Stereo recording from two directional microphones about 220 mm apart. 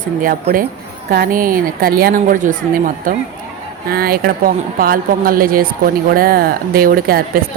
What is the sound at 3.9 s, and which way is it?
Speech, 40° right (ahead or behind).